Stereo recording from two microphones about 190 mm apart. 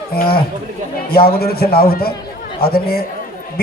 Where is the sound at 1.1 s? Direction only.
55° left (ahead or behind).